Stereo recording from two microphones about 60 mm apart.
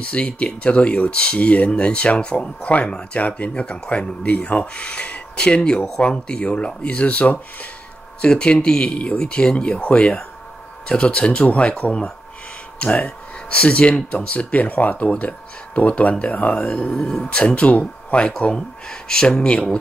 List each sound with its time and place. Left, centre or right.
0.1 s speech: centre